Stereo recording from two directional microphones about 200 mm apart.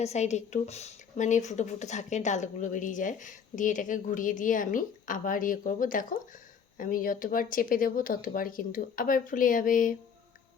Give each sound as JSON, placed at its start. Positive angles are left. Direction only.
{"t": 0.0, "sound": "speech", "side_deg": 35}